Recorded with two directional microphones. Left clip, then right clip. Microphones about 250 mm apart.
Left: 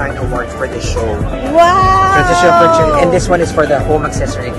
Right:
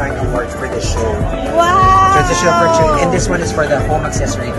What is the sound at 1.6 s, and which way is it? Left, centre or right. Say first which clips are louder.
Speech: even; left.